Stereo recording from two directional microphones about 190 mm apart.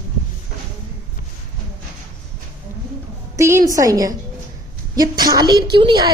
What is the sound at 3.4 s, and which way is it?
A woman's voice, 15° right (ahead or behind).